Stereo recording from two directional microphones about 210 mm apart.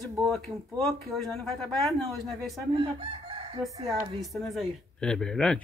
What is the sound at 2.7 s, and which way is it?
Chicken, 25° right (ahead or behind).